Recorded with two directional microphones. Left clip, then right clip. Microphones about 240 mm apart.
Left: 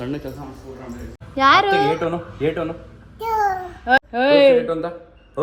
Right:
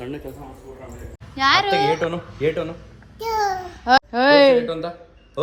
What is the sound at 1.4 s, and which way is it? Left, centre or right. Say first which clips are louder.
Speech: left 3 dB; right.